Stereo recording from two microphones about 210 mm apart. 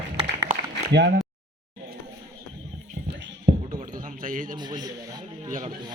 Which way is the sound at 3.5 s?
45° right (ahead or behind).